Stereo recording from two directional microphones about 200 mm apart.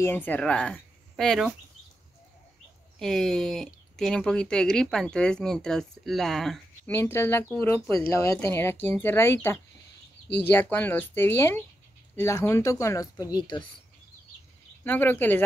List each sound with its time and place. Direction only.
0.0 s speech: 10° left (ahead or behind)
3.0 s speech: centre (ahead or behind)
6.9 s speech: 15° left (ahead or behind)
14.9 s speech: 10° left (ahead or behind)